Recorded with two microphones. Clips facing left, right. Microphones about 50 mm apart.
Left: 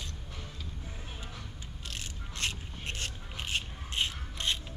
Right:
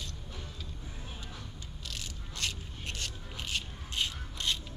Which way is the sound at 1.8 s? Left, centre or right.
Left.